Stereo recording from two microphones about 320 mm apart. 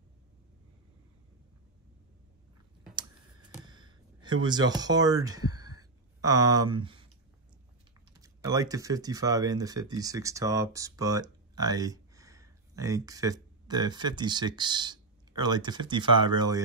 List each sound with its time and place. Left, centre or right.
3.0 s computer keyboard: centre
6.2 s speech: centre
8.2 s speech: centre